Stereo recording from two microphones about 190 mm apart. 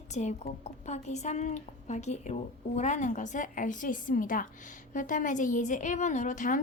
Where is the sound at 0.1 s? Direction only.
35° left (ahead or behind).